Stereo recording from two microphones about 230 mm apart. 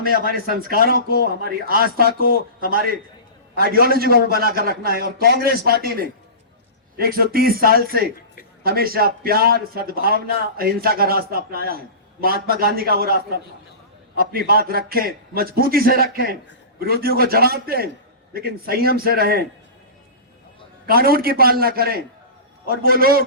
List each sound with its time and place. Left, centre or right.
0.0 s a man's voice: right
20.8 s a man's voice: right